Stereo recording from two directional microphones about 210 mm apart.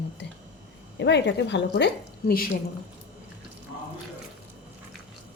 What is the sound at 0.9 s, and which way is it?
Speech, 60° left (ahead or behind).